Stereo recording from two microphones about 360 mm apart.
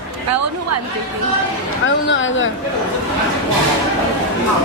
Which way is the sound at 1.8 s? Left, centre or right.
Left.